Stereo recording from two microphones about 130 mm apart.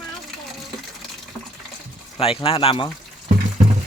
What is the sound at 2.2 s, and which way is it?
Speech, 45° left (ahead or behind).